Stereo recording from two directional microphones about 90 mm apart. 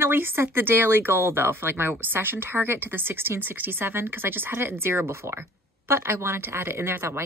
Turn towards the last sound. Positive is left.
turn(degrees=-25)  # may be behind; listen again after turning